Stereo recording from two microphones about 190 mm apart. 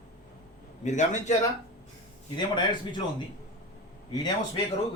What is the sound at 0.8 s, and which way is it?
Speech, 40° left (ahead or behind).